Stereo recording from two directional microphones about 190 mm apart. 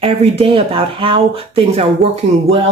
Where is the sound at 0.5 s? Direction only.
30° right (ahead or behind).